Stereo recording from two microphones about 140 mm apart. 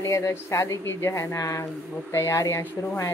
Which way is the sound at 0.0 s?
25° left (ahead or behind).